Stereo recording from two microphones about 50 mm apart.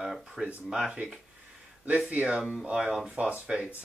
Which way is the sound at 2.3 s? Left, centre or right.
Centre.